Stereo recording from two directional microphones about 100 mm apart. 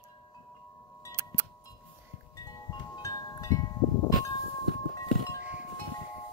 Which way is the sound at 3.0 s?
35° left (ahead or behind).